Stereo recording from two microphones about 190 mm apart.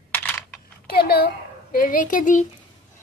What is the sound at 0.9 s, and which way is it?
A woman's voice, 55° left (ahead or behind).